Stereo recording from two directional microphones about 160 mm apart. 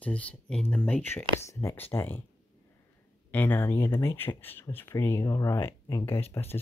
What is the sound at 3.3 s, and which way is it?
Speech, 10° left (ahead or behind).